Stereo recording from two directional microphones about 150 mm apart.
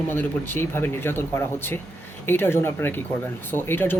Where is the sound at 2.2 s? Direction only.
15° left (ahead or behind).